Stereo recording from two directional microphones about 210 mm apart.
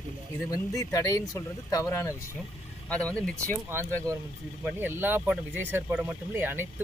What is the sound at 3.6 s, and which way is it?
Speech, 10° right (ahead or behind).